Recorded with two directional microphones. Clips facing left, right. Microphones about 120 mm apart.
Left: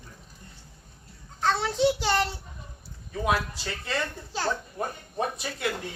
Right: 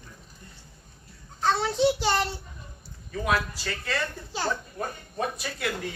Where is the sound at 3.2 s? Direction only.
20° left (ahead or behind).